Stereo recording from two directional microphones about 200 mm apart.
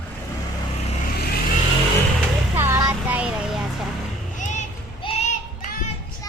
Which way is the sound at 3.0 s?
10° right (ahead or behind).